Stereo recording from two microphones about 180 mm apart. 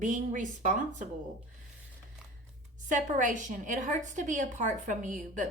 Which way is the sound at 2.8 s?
45° right (ahead or behind).